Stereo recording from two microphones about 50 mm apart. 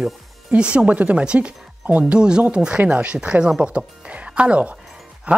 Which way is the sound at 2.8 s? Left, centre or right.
Right.